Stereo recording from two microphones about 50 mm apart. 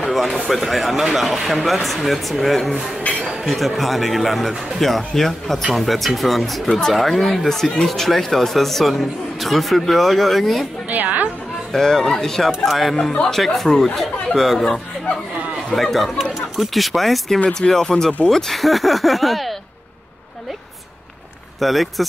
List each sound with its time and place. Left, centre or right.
0.0 s speech: centre
10.9 s a woman's voice: right
11.7 s speech: centre
21.5 s speech: centre